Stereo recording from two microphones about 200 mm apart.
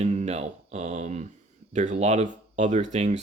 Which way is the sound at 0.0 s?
35° right (ahead or behind).